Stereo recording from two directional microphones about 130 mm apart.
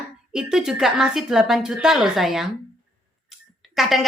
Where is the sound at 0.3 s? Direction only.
5° right (ahead or behind).